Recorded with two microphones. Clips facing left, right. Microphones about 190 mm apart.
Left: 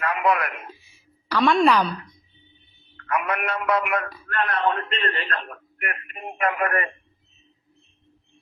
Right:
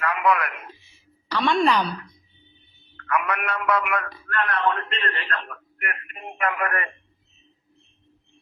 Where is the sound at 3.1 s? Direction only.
25° left (ahead or behind).